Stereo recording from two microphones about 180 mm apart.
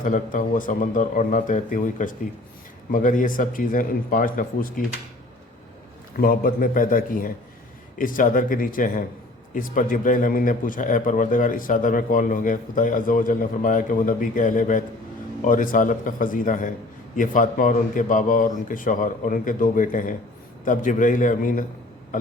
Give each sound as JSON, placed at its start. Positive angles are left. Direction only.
{"t": 0.0, "sound": "speech", "side_deg": 45}
{"t": 6.1, "sound": "speech", "side_deg": 55}